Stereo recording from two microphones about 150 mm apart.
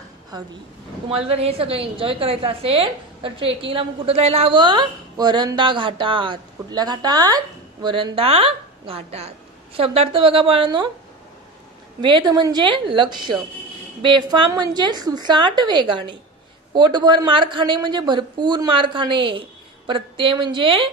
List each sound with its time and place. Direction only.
1.0 s a woman's voice: 40° right (ahead or behind)
12.0 s a woman's voice: 30° right (ahead or behind)